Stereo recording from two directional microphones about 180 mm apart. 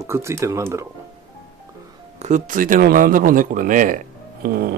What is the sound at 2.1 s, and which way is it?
Speech, 40° right (ahead or behind).